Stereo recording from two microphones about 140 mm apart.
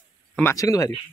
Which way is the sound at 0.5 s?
25° left (ahead or behind).